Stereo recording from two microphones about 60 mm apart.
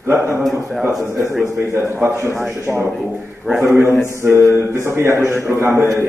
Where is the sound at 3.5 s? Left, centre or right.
Centre.